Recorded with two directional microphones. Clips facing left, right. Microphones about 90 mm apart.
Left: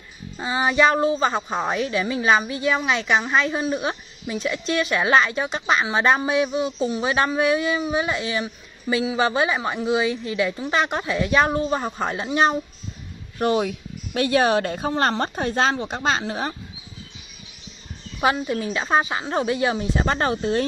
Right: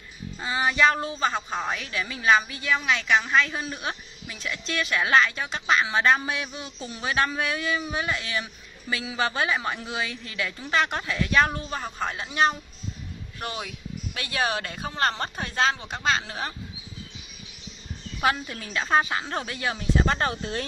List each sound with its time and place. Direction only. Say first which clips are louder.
0.4 s a woman's voice: left 3 dB; 20° left (ahead or behind)
18.2 s speech: left 5 dB; 15° left (ahead or behind)